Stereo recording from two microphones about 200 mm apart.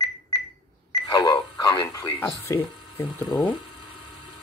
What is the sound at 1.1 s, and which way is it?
Speech, 20° left (ahead or behind).